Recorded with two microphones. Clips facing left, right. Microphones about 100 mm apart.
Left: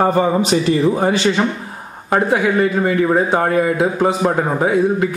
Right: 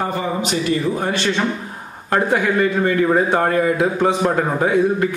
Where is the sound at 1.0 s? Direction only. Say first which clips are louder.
Left 4 dB; 10° left (ahead or behind).